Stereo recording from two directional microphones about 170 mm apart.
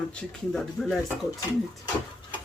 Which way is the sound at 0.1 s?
5° left (ahead or behind).